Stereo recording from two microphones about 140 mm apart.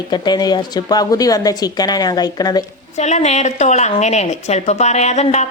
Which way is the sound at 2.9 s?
55° left (ahead or behind).